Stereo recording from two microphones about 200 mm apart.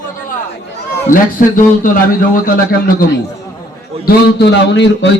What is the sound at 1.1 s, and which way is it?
Speech, 45° left (ahead or behind).